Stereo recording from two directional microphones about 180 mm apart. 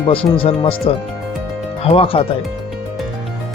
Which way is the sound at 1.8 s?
30° left (ahead or behind).